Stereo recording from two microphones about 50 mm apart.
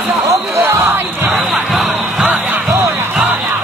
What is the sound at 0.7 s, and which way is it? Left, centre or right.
Music, right.